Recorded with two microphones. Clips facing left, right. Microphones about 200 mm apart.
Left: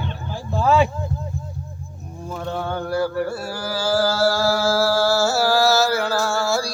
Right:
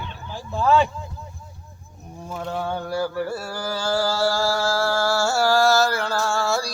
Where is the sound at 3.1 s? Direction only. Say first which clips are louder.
Left 2 dB; 5° left (ahead or behind).